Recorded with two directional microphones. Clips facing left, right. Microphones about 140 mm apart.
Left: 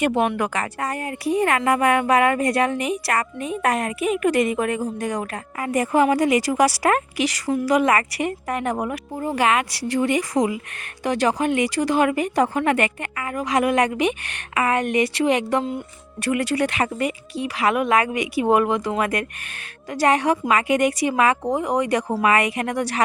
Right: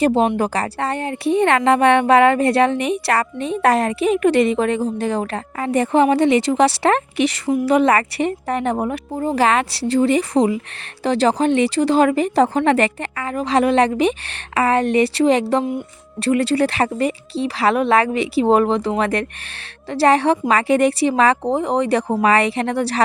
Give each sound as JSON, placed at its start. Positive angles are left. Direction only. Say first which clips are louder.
{"t": 0.0, "sound": "a woman's voice", "louder": "right 4 dB", "side_deg": -30}